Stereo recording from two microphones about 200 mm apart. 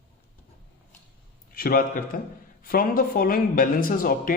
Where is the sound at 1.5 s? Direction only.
45° left (ahead or behind).